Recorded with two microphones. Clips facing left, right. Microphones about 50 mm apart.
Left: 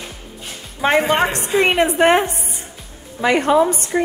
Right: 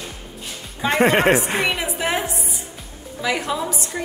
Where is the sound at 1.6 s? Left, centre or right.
Left.